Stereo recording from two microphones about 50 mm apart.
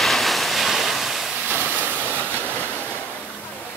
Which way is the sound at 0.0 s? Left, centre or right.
Centre.